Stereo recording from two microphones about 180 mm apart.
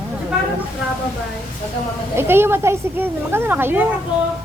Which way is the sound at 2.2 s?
15° right (ahead or behind).